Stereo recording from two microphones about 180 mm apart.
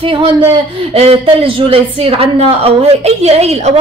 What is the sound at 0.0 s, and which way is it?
Speech, 30° right (ahead or behind).